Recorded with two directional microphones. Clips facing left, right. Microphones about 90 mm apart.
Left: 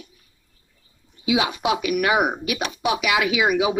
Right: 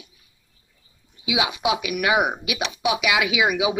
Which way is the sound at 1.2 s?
35° left (ahead or behind).